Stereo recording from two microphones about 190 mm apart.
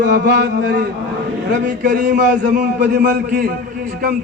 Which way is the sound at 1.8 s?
45° right (ahead or behind).